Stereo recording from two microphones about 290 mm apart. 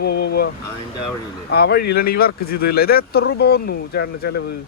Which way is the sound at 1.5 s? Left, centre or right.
Left.